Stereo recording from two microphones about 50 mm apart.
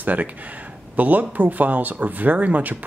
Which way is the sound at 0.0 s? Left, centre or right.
Right.